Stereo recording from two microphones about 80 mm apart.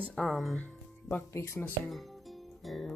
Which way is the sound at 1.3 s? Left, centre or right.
Left.